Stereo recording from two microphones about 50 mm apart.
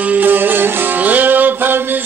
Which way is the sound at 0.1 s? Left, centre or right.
Right.